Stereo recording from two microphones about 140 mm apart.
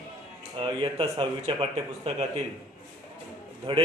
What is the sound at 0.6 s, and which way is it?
A man's voice, 35° right (ahead or behind).